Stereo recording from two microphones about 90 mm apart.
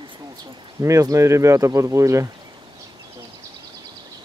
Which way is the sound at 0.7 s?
35° right (ahead or behind).